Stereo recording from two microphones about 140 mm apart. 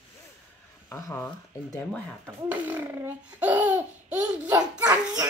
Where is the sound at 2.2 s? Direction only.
15° right (ahead or behind).